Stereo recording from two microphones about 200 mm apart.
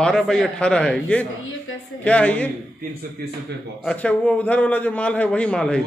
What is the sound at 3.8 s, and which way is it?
A man's voice, 5° left (ahead or behind).